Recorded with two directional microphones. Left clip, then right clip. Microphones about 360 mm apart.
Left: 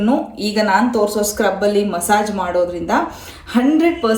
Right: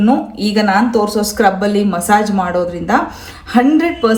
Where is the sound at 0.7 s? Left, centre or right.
Right.